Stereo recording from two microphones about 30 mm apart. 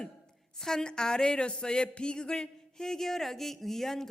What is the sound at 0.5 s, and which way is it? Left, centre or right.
A man's voice, centre.